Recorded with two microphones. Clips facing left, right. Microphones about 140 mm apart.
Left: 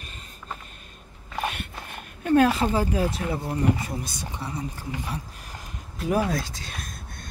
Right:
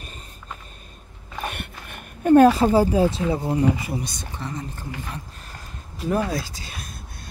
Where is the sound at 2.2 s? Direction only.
40° right (ahead or behind); by 4.0 s 10° right (ahead or behind).